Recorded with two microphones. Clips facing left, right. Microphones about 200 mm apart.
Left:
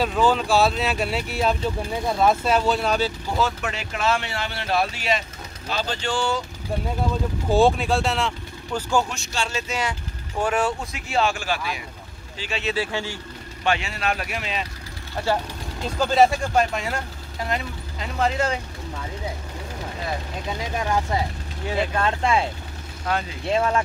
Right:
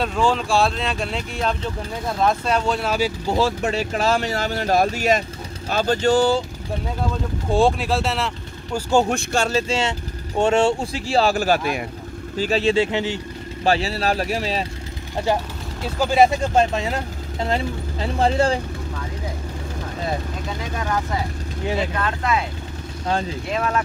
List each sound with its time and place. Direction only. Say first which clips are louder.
0.0 s speech: even; 5° left (ahead or behind)
3.3 s speech: right 4 dB; 35° right (ahead or behind)
7.4 s speech: even; centre (ahead or behind)
9.1 s speech: right 8 dB; 50° right (ahead or behind)
12.7 s speech: right 7 dB; 20° right (ahead or behind)
13.7 s speech: right 4 dB; 35° right (ahead or behind)
15.8 s speech: right 1 dB; 10° right (ahead or behind)
16.5 s speech: right 3 dB; 25° right (ahead or behind)
21.9 s speech: left 1 dB; 25° left (ahead or behind)
23.5 s speech: left 2 dB; 30° left (ahead or behind)